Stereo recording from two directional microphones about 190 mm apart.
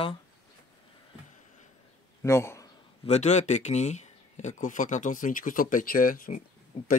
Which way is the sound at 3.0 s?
35° left (ahead or behind).